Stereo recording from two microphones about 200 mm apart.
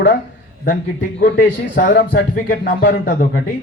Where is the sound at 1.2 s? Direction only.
45° left (ahead or behind).